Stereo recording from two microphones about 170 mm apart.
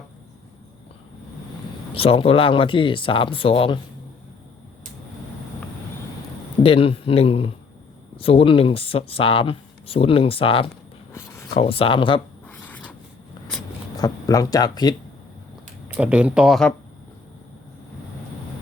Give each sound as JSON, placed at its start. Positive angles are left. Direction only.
{"t": 1.9, "sound": "speech", "side_deg": 35}
{"t": 6.6, "sound": "speech", "side_deg": 35}
{"t": 12.5, "sound": "writing", "side_deg": 10}
{"t": 13.9, "sound": "speech", "side_deg": 20}
{"t": 16.0, "sound": "speech", "side_deg": -5}